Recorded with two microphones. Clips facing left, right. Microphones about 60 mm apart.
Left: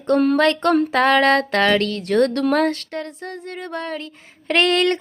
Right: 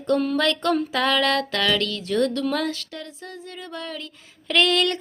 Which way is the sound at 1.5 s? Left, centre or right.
Left.